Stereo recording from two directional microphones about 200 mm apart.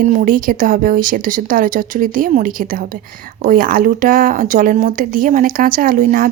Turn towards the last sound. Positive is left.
turn(degrees=-45)  # may be behind; listen again after turning